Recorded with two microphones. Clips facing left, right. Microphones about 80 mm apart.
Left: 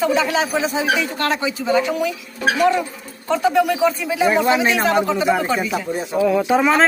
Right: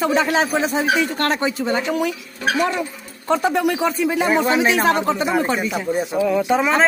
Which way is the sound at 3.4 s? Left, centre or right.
Right.